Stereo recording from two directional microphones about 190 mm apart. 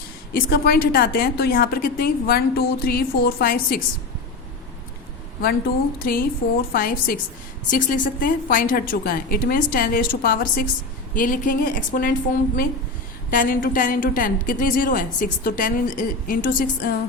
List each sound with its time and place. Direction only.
0.5 s a woman's voice: 50° left (ahead or behind)
5.4 s a woman's voice: 50° left (ahead or behind)
13.3 s a woman's voice: 45° left (ahead or behind)